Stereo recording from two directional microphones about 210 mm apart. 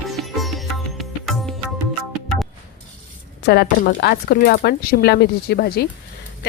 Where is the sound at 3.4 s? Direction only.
50° left (ahead or behind).